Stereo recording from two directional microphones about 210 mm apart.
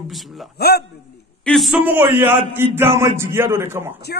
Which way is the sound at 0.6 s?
50° left (ahead or behind).